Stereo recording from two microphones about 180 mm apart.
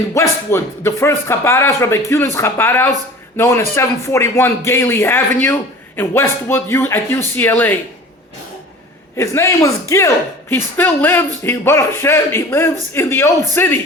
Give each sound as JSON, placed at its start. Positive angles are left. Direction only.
{"t": 0.1, "sound": "speech", "side_deg": 15}
{"t": 9.1, "sound": "speech", "side_deg": 15}